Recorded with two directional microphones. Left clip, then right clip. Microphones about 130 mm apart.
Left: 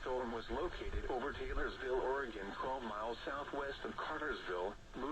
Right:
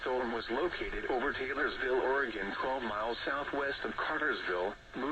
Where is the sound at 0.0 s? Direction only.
40° right (ahead or behind).